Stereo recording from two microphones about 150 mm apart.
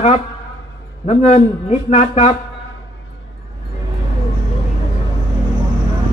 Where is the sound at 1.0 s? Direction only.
50° left (ahead or behind).